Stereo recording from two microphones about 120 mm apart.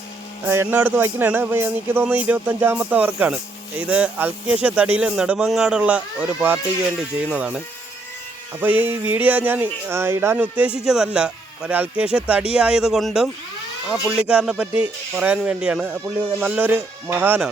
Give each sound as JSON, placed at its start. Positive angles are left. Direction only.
{"t": 0.4, "sound": "speech", "side_deg": -20}
{"t": 8.6, "sound": "speech", "side_deg": -15}